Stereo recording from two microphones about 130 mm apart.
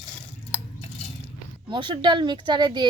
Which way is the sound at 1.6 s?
40° right (ahead or behind).